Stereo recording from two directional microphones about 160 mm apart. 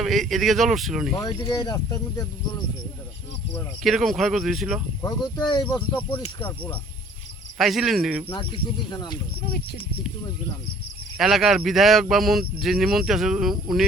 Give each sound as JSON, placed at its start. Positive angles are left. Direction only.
{"t": 0.0, "sound": "speech", "side_deg": 0}
{"t": 1.1, "sound": "speech", "side_deg": 25}
{"t": 3.8, "sound": "speech", "side_deg": 0}
{"t": 5.0, "sound": "speech", "side_deg": 25}
{"t": 6.4, "sound": "speech", "side_deg": 10}
{"t": 7.6, "sound": "speech", "side_deg": 0}
{"t": 8.3, "sound": "speech", "side_deg": 35}
{"t": 11.2, "sound": "speech", "side_deg": -5}